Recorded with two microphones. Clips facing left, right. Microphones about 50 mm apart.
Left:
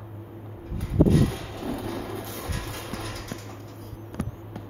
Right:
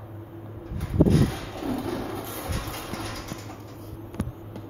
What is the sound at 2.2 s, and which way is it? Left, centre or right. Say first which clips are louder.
Train: right 1 dB; right.